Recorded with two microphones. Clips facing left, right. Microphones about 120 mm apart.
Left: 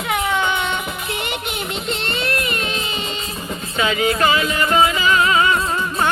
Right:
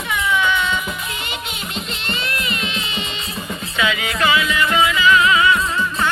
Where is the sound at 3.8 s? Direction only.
40° left (ahead or behind).